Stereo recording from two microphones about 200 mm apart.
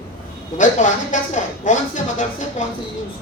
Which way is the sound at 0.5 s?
40° left (ahead or behind).